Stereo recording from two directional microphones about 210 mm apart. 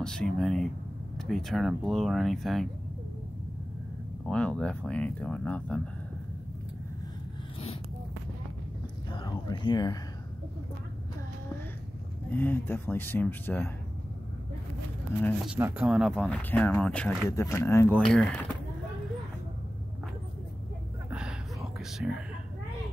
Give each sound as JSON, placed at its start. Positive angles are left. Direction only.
{"t": 0.0, "sound": "speech", "side_deg": 5}
{"t": 4.3, "sound": "speech", "side_deg": 5}
{"t": 9.1, "sound": "speech", "side_deg": 20}
{"t": 12.3, "sound": "speech", "side_deg": 10}
{"t": 15.4, "sound": "speech", "side_deg": -5}
{"t": 21.1, "sound": "a sound", "side_deg": -5}
{"t": 21.7, "sound": "whispering", "side_deg": 0}